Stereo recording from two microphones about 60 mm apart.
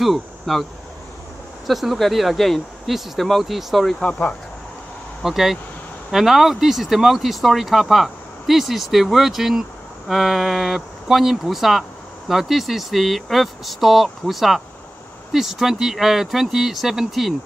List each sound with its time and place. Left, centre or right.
0.0 s speech: centre
1.7 s speech: centre
4.0 s speech: left
5.2 s speech: centre